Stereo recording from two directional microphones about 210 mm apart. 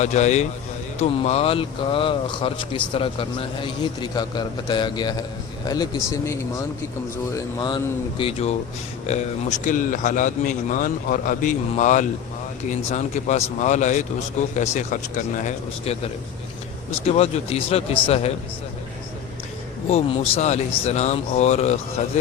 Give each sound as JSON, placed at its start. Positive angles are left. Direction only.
{"t": 0.0, "sound": "speech", "side_deg": 35}
{"t": 17.2, "sound": "speech", "side_deg": 30}
{"t": 19.9, "sound": "speech", "side_deg": 30}